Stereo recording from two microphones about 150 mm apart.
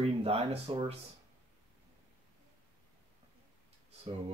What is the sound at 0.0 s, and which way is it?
Speech, 40° right (ahead or behind).